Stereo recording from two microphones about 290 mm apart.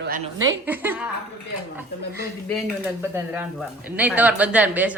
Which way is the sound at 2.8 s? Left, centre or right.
Centre.